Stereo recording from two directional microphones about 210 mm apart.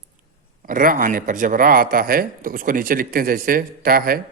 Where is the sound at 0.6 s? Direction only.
40° right (ahead or behind).